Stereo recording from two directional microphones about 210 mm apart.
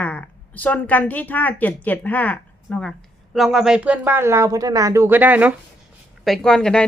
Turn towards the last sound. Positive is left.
turn(degrees=5)  # may be behind; listen again after turning